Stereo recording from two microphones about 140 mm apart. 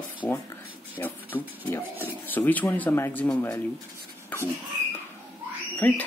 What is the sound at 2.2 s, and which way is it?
Speech, 10° left (ahead or behind).